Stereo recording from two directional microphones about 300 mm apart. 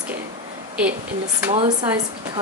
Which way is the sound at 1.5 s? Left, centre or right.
Centre.